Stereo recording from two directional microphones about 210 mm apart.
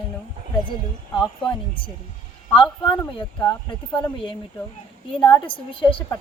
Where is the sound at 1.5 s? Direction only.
25° left (ahead or behind).